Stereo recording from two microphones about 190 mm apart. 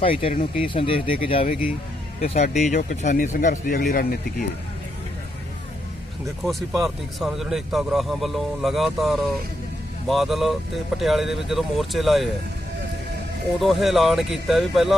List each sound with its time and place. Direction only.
0.0 s speech: 30° left (ahead or behind); by 4.4 s 50° left (ahead or behind)
6.4 s speech: centre (ahead or behind)
13.6 s speech: centre (ahead or behind)